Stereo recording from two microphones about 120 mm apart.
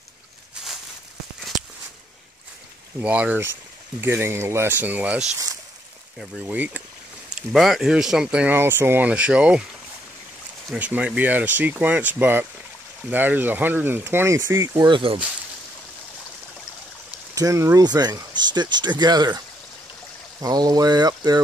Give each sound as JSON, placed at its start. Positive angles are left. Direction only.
{"t": 3.0, "sound": "speech", "side_deg": -10}
{"t": 6.4, "sound": "speech", "side_deg": -15}
{"t": 7.2, "sound": "speech", "side_deg": 0}
{"t": 10.7, "sound": "speech", "side_deg": -10}
{"t": 14.9, "sound": "speech", "side_deg": -45}
{"t": 17.4, "sound": "speech", "side_deg": -25}